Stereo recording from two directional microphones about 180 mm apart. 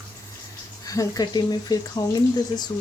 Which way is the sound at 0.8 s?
20° left (ahead or behind).